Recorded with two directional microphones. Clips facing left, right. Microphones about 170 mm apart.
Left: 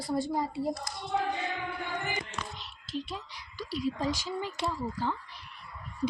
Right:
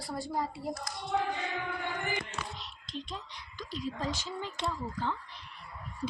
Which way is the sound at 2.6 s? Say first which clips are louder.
Left 5 dB; 5° left (ahead or behind).